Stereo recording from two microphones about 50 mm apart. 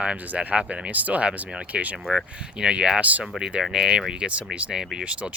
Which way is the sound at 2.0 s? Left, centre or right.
Centre.